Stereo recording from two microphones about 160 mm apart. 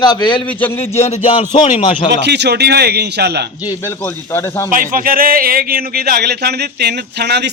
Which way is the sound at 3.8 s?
15° left (ahead or behind).